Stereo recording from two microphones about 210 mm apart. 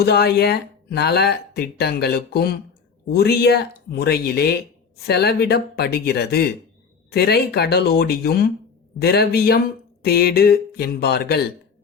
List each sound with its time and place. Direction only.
0.0 s speech: 50° left (ahead or behind)